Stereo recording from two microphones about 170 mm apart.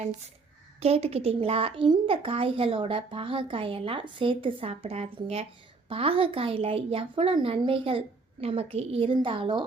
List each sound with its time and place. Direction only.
0.8 s a woman's voice: 35° right (ahead or behind)